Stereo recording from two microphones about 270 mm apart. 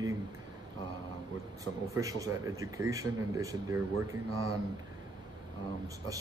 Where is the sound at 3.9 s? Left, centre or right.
Right.